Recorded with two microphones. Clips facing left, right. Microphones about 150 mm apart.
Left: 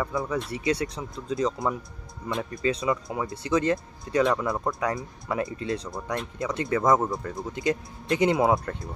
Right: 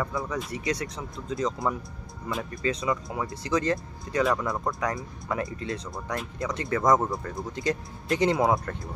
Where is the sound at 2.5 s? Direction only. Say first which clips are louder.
Left 2 dB; 25° left (ahead or behind).